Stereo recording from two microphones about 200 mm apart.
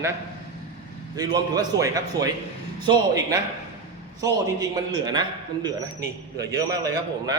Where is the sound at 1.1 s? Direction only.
20° right (ahead or behind).